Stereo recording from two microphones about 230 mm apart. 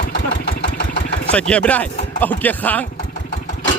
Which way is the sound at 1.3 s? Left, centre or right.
Centre.